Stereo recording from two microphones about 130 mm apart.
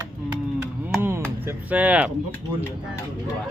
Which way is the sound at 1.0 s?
15° right (ahead or behind).